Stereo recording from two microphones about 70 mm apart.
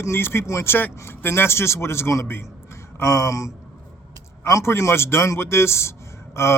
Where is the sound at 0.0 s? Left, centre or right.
Left.